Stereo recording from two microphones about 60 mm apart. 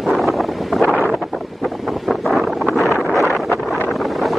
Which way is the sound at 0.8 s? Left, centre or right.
Left.